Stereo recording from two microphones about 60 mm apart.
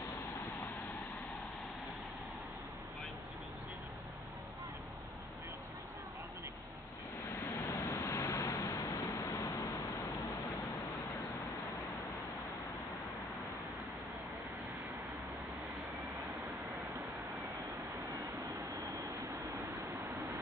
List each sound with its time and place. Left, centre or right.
7.3 s vehicle: left